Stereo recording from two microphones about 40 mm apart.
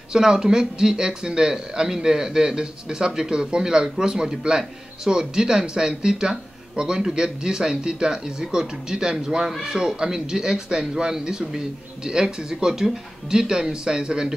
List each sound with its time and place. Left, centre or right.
0.1 s speech: centre